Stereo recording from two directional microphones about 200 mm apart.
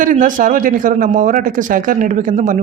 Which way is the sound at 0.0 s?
40° right (ahead or behind).